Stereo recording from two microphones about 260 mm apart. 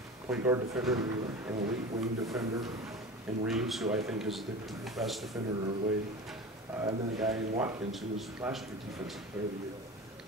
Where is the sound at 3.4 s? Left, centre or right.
Centre.